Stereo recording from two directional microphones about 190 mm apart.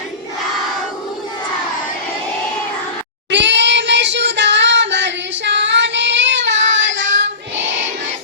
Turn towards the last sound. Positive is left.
turn(degrees=-75)  # may be behind; listen again after turning